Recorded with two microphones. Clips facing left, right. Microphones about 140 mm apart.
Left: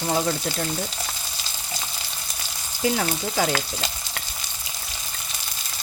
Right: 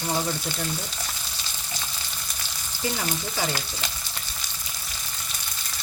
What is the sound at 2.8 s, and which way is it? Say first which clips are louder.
Frying: left 5 dB; 60° left (ahead or behind).